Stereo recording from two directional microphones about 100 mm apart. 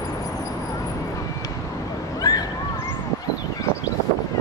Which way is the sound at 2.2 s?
35° left (ahead or behind).